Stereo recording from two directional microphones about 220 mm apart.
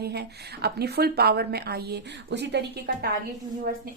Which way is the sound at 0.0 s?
45° right (ahead or behind).